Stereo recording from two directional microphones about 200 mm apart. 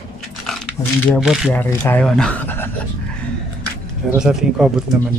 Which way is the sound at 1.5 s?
10° left (ahead or behind).